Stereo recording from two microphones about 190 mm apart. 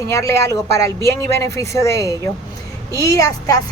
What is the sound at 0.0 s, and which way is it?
A woman's voice, 15° left (ahead or behind).